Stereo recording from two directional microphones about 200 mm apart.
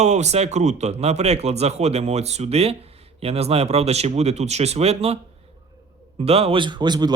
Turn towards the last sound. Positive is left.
turn(degrees=-20)  # may be behind; listen again after turning